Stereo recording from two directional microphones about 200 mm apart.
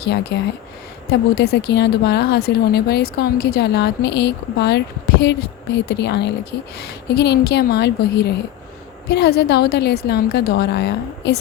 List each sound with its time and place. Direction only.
0.0 s speech: 55° left (ahead or behind)